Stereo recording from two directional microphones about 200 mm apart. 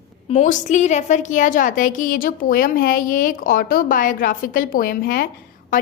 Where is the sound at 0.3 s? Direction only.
35° left (ahead or behind).